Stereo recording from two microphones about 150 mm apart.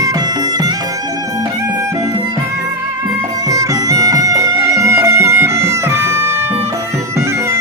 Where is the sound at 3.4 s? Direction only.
20° right (ahead or behind).